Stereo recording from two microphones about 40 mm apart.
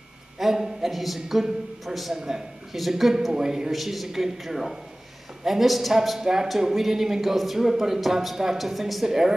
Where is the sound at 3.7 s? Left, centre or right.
Centre.